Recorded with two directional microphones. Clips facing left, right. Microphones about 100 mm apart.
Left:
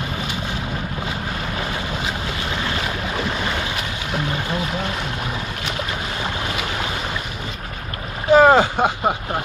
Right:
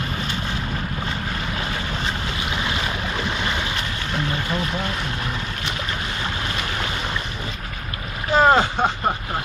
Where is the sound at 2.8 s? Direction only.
5° left (ahead or behind).